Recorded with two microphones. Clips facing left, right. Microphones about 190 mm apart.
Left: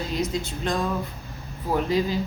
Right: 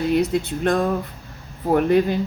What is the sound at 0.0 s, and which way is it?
Speech, 60° right (ahead or behind).